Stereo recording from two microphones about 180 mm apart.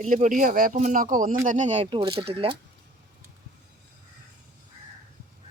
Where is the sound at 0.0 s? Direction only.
45° right (ahead or behind).